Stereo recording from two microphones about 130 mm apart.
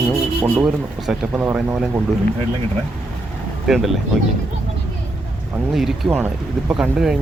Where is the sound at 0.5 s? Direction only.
5° right (ahead or behind).